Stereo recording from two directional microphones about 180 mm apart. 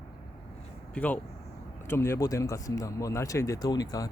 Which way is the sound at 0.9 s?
10° left (ahead or behind).